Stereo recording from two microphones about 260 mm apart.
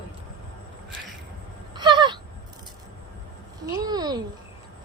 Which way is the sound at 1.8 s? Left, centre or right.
Centre.